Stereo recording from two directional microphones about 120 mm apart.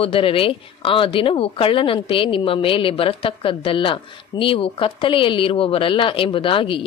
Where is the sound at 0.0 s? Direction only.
50° left (ahead or behind).